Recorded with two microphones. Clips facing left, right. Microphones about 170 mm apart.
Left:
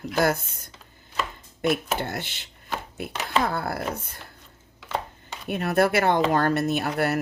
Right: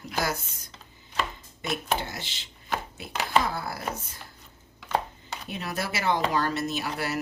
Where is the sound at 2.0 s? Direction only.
55° left (ahead or behind).